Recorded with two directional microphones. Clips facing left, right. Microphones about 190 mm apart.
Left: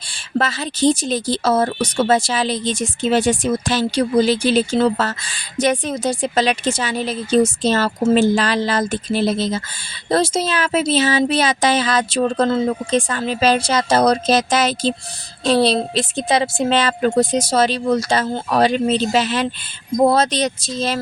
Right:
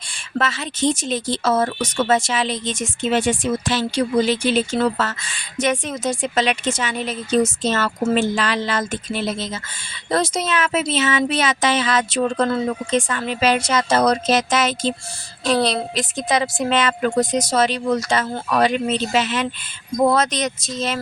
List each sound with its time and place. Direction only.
0.1 s speech: 35° left (ahead or behind)